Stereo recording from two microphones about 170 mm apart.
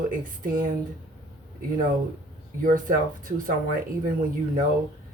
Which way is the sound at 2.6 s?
55° right (ahead or behind).